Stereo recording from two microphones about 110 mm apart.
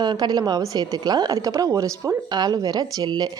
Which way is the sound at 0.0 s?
40° right (ahead or behind).